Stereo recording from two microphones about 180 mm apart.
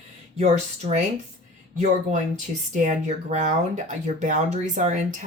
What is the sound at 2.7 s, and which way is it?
Speech, 40° right (ahead or behind).